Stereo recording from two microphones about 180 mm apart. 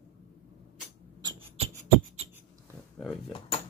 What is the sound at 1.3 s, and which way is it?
Beatboxing, 30° right (ahead or behind).